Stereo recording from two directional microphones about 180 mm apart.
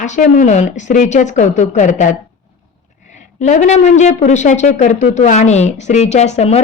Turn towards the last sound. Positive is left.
turn(degrees=35)  # may be behind; listen again after turning